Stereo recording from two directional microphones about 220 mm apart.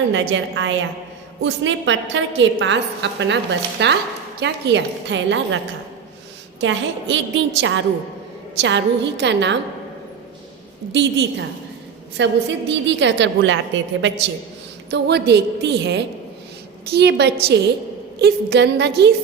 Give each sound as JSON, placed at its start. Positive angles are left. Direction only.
{"t": 0.1, "sound": "a woman's voice", "side_deg": -60}
{"t": 6.6, "sound": "a woman's voice", "side_deg": -55}
{"t": 10.9, "sound": "a woman's voice", "side_deg": -55}